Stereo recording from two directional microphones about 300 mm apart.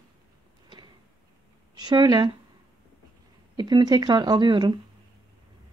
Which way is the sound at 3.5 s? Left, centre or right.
Centre.